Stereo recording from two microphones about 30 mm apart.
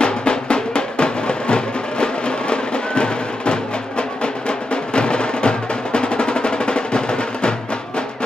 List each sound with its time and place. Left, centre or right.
0.0 s music: left